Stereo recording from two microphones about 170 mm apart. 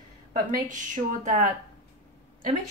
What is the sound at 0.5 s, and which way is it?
A woman's voice, 50° right (ahead or behind).